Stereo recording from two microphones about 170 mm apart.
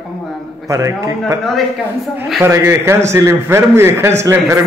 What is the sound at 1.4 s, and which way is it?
Speech, centre (ahead or behind).